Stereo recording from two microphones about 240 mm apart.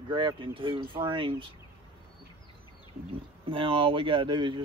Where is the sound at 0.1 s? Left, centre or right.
Right.